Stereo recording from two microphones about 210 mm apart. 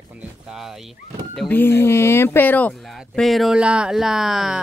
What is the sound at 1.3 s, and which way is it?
Speech, 10° left (ahead or behind).